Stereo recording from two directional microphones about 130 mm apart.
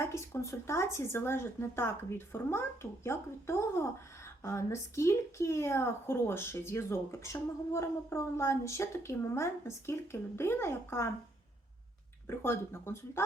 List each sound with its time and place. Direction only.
0.0 s a sound: 20° left (ahead or behind)
0.7 s a woman's voice: 20° left (ahead or behind)
12.3 s a woman's voice: 20° left (ahead or behind)